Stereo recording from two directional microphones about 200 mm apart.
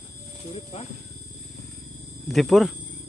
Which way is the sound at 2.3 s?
Centre (ahead or behind).